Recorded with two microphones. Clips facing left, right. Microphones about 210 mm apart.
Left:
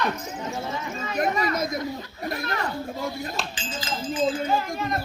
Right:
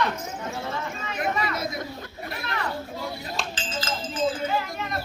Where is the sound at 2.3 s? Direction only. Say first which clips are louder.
Left 4 dB; 45° left (ahead or behind).